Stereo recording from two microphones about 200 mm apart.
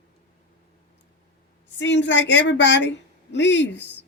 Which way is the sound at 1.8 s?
60° left (ahead or behind).